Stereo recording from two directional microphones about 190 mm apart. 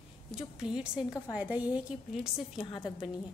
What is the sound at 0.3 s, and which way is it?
A woman's voice, 5° right (ahead or behind).